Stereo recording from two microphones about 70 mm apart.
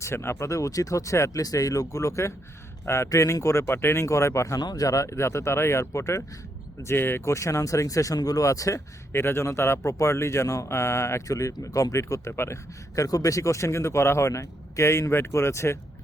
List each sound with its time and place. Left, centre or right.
0.0 s speech: left
4.6 s speech: left
6.8 s speech: left
9.1 s speech: left
13.0 s speech: left